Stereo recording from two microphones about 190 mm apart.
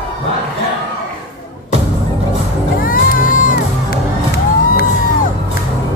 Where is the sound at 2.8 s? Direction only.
45° left (ahead or behind).